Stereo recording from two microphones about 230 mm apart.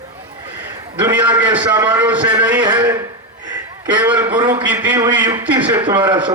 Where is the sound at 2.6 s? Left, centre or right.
Centre.